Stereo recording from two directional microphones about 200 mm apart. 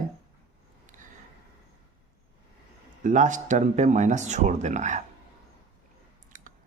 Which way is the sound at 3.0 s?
40° right (ahead or behind).